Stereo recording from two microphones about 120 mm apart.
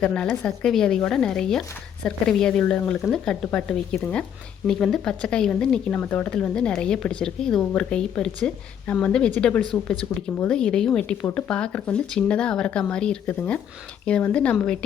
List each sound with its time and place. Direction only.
0.0 s speech: 10° left (ahead or behind)